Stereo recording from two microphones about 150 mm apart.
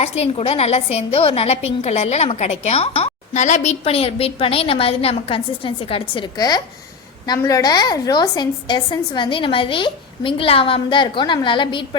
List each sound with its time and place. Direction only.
0.0 s a woman's voice: 45° left (ahead or behind)